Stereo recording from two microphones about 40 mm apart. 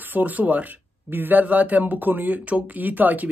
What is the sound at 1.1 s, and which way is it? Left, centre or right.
Speech, right.